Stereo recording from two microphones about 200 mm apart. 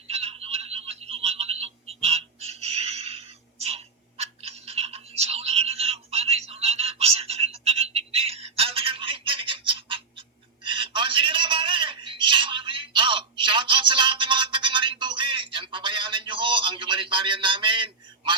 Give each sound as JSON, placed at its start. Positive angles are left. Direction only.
{"t": 0.1, "sound": "telephone", "side_deg": -30}